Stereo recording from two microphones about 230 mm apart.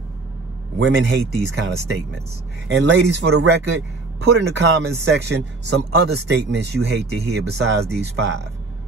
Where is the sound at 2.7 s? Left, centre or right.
Right.